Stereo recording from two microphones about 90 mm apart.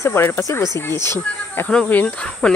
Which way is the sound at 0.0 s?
30° left (ahead or behind).